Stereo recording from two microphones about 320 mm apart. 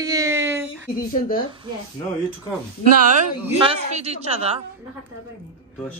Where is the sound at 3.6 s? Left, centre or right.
Centre.